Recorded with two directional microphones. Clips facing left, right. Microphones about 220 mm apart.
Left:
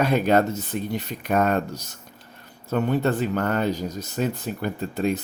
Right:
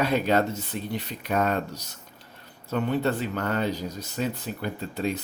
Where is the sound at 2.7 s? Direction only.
45° left (ahead or behind).